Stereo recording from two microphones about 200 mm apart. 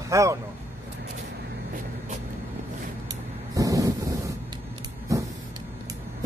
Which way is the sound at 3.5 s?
15° right (ahead or behind).